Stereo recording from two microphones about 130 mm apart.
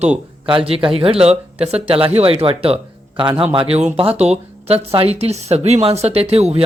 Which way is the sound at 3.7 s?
55° right (ahead or behind).